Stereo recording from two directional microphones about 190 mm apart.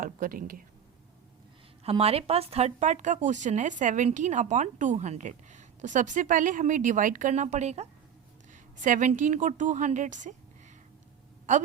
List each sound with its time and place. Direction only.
0.0 s speech: 45° right (ahead or behind)
1.8 s speech: 30° right (ahead or behind)